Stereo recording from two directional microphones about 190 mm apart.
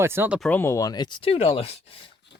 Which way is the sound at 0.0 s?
10° right (ahead or behind).